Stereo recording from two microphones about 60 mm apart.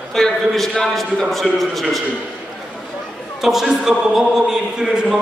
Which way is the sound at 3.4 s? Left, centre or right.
Centre.